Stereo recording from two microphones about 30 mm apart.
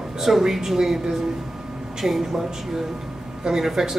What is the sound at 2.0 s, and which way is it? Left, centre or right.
Speech, centre.